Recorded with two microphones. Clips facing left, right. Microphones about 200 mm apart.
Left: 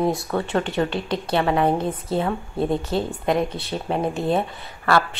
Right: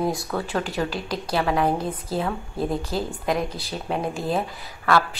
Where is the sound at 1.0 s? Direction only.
30° left (ahead or behind).